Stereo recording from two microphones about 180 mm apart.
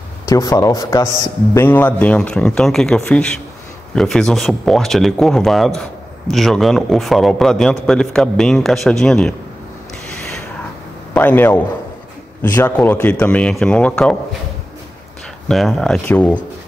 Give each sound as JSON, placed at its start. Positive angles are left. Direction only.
{"t": 0.3, "sound": "a man's voice", "side_deg": 20}
{"t": 11.1, "sound": "a man's voice", "side_deg": 10}
{"t": 15.4, "sound": "a man's voice", "side_deg": 0}